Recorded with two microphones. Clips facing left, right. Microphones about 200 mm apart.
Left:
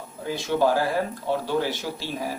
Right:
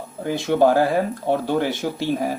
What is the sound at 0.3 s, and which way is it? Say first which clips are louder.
Speech: right 5 dB; 55° right (ahead or behind).